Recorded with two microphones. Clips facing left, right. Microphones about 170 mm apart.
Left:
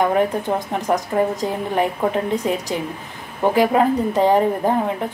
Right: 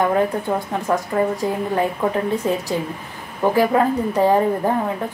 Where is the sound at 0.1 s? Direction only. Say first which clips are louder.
Even; 15° left (ahead or behind).